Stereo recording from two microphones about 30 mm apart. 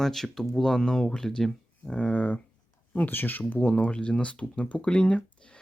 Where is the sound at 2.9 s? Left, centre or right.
Left.